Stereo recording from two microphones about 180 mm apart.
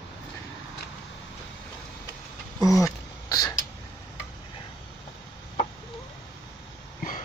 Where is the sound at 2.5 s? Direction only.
Centre (ahead or behind).